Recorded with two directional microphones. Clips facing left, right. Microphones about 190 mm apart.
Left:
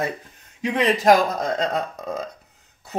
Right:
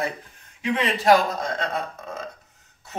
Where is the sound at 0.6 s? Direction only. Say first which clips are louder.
Left 4 dB; 35° left (ahead or behind).